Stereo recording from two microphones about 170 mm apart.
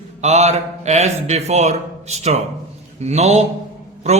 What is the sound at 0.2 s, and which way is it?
A man's voice, 40° right (ahead or behind).